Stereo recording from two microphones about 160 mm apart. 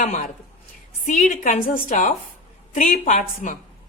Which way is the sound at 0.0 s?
50° left (ahead or behind).